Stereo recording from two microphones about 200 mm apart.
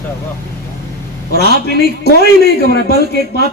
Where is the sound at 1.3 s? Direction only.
50° left (ahead or behind).